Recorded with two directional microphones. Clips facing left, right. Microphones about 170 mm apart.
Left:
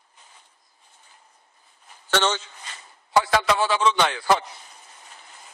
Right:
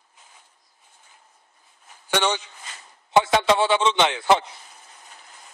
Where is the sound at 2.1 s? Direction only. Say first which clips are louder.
Even; 15° right (ahead or behind).